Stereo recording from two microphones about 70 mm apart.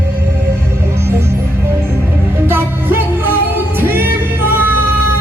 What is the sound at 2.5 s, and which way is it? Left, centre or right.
Music, right.